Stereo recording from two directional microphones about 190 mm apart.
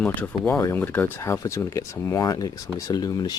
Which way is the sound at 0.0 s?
5° left (ahead or behind).